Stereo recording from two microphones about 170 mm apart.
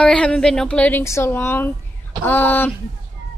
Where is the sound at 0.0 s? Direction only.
5° left (ahead or behind).